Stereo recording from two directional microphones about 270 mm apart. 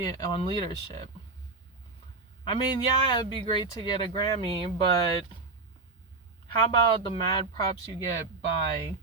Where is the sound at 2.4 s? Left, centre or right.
Centre.